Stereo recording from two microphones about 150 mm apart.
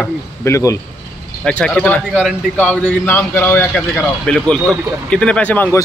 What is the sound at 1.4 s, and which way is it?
A man's voice, 5° left (ahead or behind).